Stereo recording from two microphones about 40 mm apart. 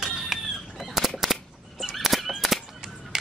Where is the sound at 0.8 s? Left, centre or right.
Centre.